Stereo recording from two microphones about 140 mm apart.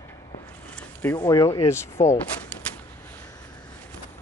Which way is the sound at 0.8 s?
10° left (ahead or behind).